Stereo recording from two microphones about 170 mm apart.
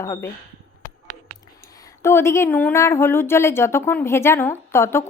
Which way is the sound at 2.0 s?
15° left (ahead or behind).